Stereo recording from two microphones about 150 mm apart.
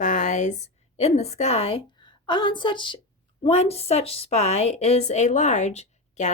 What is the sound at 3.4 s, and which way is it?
A woman's voice, 45° left (ahead or behind).